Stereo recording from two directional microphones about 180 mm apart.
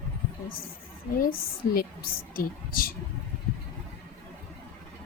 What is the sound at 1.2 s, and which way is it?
A woman's voice, 55° left (ahead or behind).